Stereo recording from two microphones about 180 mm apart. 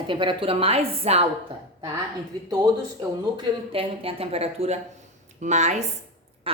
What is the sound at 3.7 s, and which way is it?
A woman's voice, 30° right (ahead or behind).